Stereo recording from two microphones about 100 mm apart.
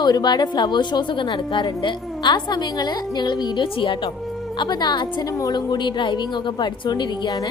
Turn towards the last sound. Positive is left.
turn(degrees=40)  # may be behind; listen again after turning